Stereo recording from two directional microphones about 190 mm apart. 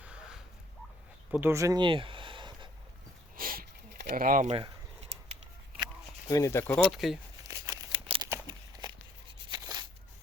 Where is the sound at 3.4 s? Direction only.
50° right (ahead or behind).